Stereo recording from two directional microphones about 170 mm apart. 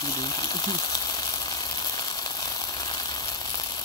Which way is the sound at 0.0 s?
25° left (ahead or behind).